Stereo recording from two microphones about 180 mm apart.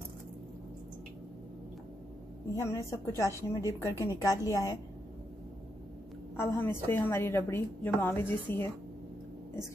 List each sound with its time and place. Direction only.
2.5 s a woman's voice: 15° left (ahead or behind)
6.4 s a woman's voice: 15° left (ahead or behind)